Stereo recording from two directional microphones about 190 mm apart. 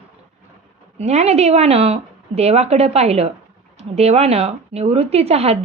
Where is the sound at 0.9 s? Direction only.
35° right (ahead or behind).